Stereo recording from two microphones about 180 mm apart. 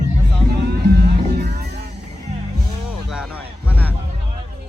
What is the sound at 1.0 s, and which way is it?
Music, 60° right (ahead or behind).